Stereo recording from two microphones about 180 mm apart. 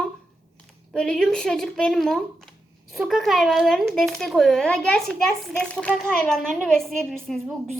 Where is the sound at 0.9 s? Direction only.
5° left (ahead or behind).